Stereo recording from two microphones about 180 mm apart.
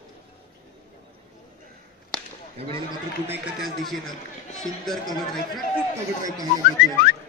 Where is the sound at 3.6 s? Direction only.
Centre (ahead or behind).